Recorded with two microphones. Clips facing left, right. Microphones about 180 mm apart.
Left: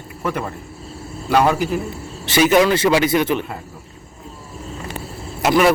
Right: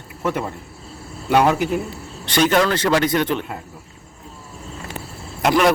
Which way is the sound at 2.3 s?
5° left (ahead or behind).